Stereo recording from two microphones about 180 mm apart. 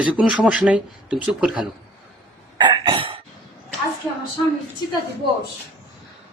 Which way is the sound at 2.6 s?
25° right (ahead or behind).